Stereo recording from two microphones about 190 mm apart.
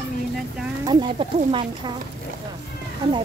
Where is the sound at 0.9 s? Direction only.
25° right (ahead or behind).